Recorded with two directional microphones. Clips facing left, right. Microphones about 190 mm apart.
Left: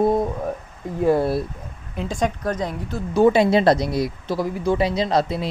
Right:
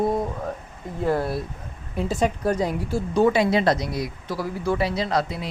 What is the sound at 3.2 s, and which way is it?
Speech, 25° left (ahead or behind).